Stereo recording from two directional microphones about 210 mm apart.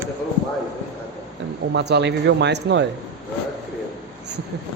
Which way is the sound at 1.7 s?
55° right (ahead or behind).